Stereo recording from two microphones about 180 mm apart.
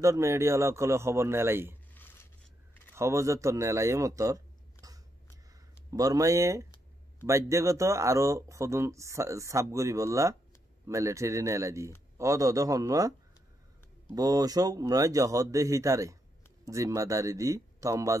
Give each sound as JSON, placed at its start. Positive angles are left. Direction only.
{"t": 0.0, "sound": "speech", "side_deg": -15}
{"t": 2.0, "sound": "a sound", "side_deg": 10}
{"t": 2.9, "sound": "speech", "side_deg": -15}
{"t": 4.8, "sound": "a sound", "side_deg": -20}
{"t": 5.9, "sound": "a man's voice", "side_deg": -20}
{"t": 14.1, "sound": "a man's voice", "side_deg": -20}